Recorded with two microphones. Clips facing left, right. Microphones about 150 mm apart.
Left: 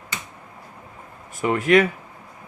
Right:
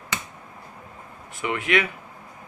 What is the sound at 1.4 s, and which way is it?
Speech, 40° left (ahead or behind).